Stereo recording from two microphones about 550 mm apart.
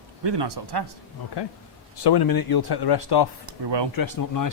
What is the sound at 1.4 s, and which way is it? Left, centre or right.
Speech, left.